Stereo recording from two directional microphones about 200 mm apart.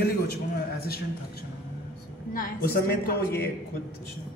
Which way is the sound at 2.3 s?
50° left (ahead or behind).